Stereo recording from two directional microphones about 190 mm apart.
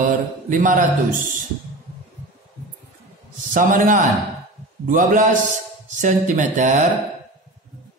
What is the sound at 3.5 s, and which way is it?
A man's voice, 45° right (ahead or behind).